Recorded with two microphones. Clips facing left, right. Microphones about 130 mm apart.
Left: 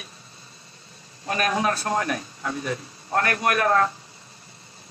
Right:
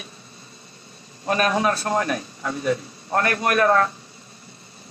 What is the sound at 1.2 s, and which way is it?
A man's voice, 35° right (ahead or behind).